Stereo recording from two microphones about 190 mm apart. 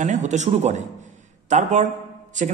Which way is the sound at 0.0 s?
40° right (ahead or behind).